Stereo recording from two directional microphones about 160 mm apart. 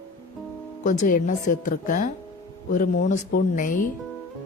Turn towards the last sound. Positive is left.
turn(degrees=55)  # may be behind; listen again after turning